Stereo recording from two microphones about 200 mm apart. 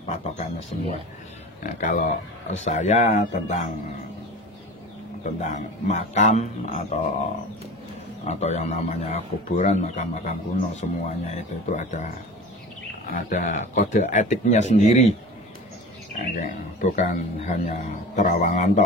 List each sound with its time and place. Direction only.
0.7 s a man's voice: 35° left (ahead or behind)
5.2 s a man's voice: 35° left (ahead or behind)
8.3 s a man's voice: 35° left (ahead or behind)
16.3 s a man's voice: 35° left (ahead or behind)